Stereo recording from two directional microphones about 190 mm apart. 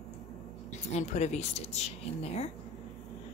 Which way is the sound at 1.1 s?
35° left (ahead or behind).